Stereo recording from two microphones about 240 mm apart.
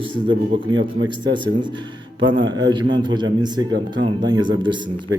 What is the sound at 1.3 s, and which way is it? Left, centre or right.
A man's voice, centre.